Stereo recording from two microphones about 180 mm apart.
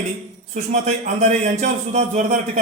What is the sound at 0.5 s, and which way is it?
A man's voice, 40° right (ahead or behind).